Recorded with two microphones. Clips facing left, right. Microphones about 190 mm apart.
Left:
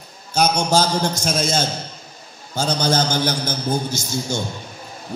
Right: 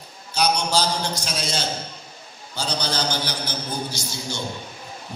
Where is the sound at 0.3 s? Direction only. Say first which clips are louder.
Left 4 dB; 45° left (ahead or behind).